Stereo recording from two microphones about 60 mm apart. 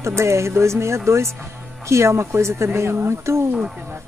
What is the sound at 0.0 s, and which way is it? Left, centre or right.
Speech, right.